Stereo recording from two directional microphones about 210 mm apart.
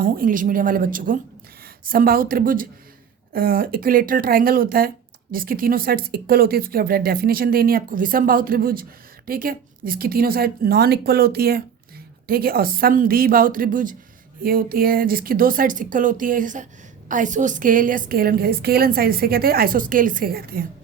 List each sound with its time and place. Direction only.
0.0 s a woman's voice: 40° right (ahead or behind)